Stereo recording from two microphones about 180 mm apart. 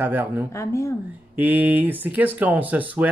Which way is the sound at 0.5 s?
15° left (ahead or behind).